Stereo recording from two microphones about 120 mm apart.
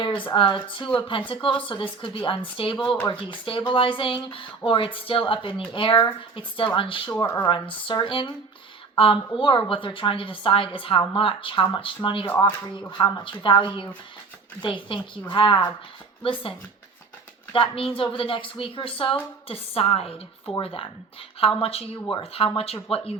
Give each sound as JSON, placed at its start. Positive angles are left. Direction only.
{"t": 0.0, "sound": "speech", "side_deg": 45}